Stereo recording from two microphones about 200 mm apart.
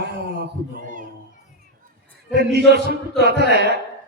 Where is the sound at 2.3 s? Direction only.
55° right (ahead or behind).